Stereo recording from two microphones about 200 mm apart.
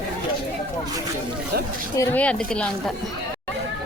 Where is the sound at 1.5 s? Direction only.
50° right (ahead or behind).